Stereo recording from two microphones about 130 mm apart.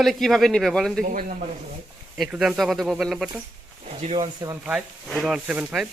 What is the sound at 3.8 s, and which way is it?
Speech, 55° right (ahead or behind).